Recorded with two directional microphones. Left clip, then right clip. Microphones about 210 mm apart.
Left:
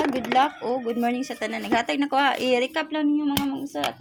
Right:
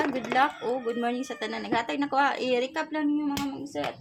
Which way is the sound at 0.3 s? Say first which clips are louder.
Left 3 dB; 15° left (ahead or behind).